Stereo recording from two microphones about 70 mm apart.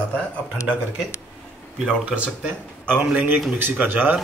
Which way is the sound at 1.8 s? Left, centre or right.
Centre.